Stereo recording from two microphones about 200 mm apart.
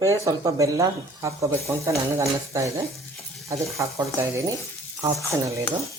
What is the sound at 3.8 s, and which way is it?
Speech, 15° right (ahead or behind).